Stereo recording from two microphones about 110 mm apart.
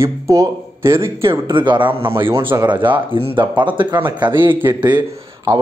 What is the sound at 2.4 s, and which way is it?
Speech, 45° right (ahead or behind).